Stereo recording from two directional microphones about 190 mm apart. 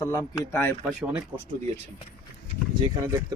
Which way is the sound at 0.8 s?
5° right (ahead or behind).